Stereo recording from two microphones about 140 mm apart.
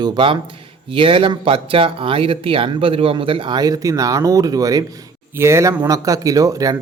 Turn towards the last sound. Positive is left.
turn(degrees=-25)  # may be behind; listen again after turning